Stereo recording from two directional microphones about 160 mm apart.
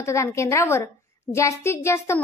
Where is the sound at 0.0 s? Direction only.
20° left (ahead or behind).